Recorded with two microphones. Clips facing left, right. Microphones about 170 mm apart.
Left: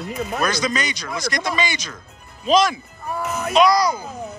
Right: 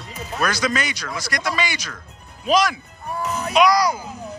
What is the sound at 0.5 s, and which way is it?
Speech, 5° right (ahead or behind).